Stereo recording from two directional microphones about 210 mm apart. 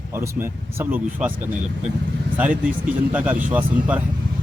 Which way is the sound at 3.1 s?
10° right (ahead or behind).